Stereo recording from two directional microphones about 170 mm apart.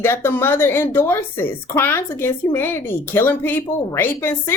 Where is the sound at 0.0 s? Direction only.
15° left (ahead or behind).